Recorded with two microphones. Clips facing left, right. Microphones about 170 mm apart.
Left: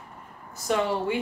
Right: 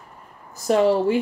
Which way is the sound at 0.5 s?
40° right (ahead or behind).